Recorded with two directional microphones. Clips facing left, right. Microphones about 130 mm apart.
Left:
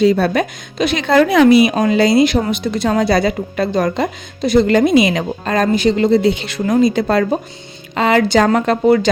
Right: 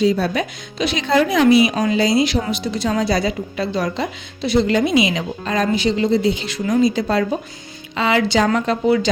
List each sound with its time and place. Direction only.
0.0 s a woman's voice: 60° left (ahead or behind)